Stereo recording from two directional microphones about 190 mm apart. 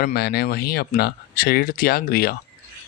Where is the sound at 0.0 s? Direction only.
55° left (ahead or behind).